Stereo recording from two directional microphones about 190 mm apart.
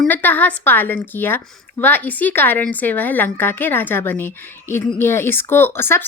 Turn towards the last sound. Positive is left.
turn(degrees=10)  # may be behind; listen again after turning